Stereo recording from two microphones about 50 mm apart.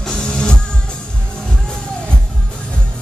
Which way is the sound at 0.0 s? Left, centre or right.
Centre.